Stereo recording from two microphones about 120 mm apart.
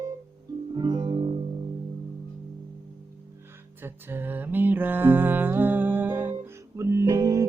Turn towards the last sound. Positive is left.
turn(degrees=-30)  # may be behind; listen again after turning